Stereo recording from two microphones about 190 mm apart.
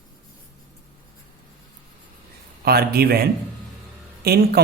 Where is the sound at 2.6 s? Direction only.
55° right (ahead or behind).